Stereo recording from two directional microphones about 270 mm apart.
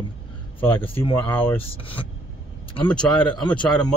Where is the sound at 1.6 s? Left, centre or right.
Centre.